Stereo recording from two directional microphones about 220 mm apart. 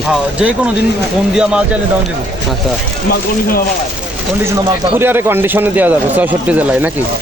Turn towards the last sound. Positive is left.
turn(degrees=-5)  # may be behind; listen again after turning